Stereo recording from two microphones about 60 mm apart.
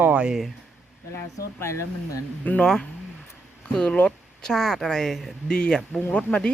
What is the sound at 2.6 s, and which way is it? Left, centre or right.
Speech, centre.